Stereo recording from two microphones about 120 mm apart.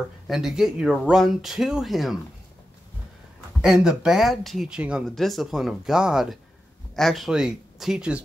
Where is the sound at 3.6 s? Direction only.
5° right (ahead or behind).